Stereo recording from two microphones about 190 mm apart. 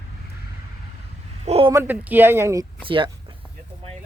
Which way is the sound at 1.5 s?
30° right (ahead or behind).